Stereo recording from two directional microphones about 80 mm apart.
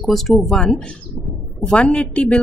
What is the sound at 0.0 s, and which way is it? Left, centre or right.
A woman's voice, centre.